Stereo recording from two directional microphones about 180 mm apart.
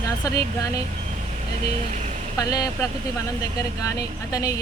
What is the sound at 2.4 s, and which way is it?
Speech, 20° left (ahead or behind).